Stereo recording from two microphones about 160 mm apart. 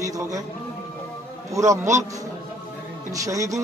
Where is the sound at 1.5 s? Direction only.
20° right (ahead or behind).